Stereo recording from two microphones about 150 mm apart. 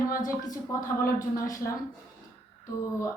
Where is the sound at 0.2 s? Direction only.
25° left (ahead or behind).